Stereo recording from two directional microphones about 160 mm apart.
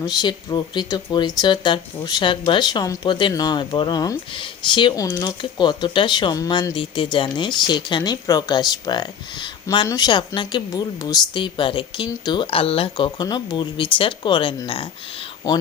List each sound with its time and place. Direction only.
0.0 s speech: 25° left (ahead or behind)